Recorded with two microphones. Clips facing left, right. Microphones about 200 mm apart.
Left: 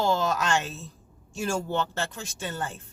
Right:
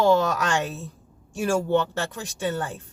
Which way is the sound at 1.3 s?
15° right (ahead or behind).